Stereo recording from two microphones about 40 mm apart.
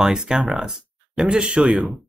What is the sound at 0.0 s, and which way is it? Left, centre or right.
Speech, centre.